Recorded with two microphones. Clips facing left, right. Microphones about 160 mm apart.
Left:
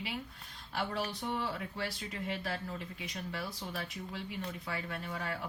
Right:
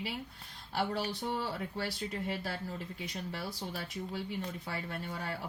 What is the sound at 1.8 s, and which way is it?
Speech, 35° right (ahead or behind).